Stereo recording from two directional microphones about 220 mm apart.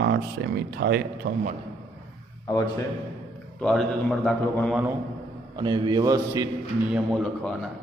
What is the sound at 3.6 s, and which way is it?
A man's voice, centre (ahead or behind).